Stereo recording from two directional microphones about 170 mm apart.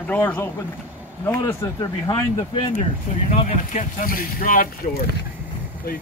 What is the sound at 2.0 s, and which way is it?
Speech, 25° left (ahead or behind).